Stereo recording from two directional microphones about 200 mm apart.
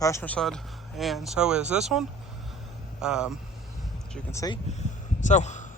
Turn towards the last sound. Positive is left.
turn(degrees=35)  # may be behind; listen again after turning